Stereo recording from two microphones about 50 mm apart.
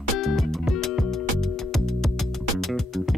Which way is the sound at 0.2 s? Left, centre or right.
Centre.